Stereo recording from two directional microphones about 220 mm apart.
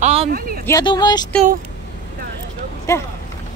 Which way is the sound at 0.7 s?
20° left (ahead or behind).